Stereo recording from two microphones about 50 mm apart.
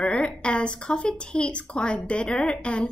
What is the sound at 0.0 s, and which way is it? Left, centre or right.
A woman's voice, centre.